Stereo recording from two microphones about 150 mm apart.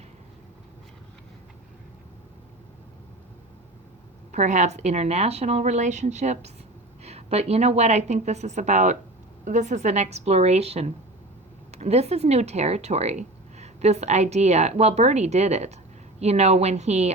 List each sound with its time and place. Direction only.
4.3 s speech: 50° right (ahead or behind)